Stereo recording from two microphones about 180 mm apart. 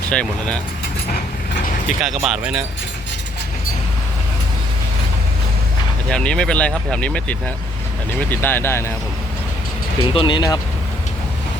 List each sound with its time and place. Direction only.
0.1 s speech: 5° left (ahead or behind)
2.0 s speech: centre (ahead or behind)
6.1 s speech: 5° left (ahead or behind)
10.0 s speech: 30° left (ahead or behind)